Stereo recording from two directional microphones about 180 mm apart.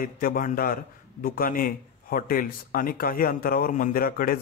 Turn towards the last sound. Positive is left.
turn(degrees=50)  # may be behind; listen again after turning